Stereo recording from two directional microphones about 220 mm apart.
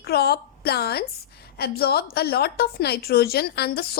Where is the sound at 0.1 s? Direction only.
45° left (ahead or behind).